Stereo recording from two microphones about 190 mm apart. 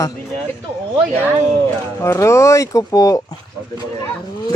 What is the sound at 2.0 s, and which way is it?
Speech, 15° left (ahead or behind).